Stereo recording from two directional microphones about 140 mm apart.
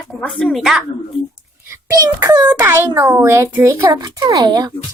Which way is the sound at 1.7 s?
25° right (ahead or behind).